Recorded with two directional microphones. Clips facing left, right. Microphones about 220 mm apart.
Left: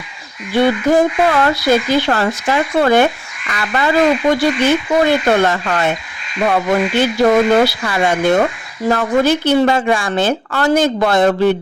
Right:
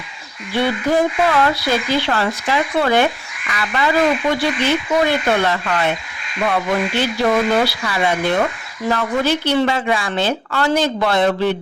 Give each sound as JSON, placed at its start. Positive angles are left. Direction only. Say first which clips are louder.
{"t": 0.5, "sound": "speech", "louder": "left 5 dB", "side_deg": 45}